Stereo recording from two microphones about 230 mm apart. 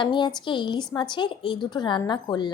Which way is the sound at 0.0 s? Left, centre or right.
Left.